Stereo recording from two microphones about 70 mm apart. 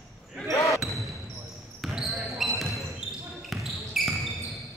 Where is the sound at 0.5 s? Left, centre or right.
Left.